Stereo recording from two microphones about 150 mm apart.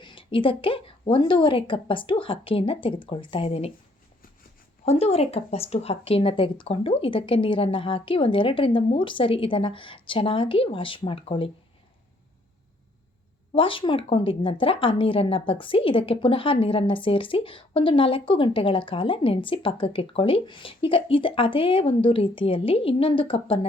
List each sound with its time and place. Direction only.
0.0 s a woman's voice: 35° left (ahead or behind)
4.9 s a woman's voice: 45° left (ahead or behind)
13.5 s a woman's voice: 35° left (ahead or behind)